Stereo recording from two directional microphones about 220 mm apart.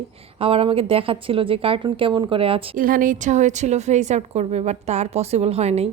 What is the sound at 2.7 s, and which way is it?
A woman's voice, 40° right (ahead or behind).